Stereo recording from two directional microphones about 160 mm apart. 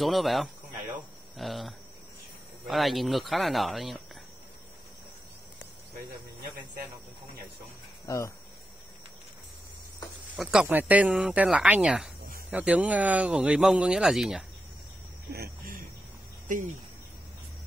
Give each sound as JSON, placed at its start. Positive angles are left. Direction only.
{"t": 0.0, "sound": "speech", "side_deg": 0}
{"t": 10.3, "sound": "speech", "side_deg": -5}
{"t": 15.3, "sound": "a sound", "side_deg": -70}